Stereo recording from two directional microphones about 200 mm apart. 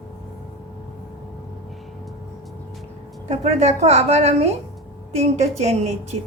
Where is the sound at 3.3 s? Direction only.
30° right (ahead or behind).